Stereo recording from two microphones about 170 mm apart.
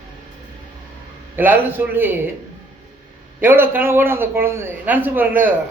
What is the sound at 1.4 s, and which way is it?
Speech, 10° right (ahead or behind).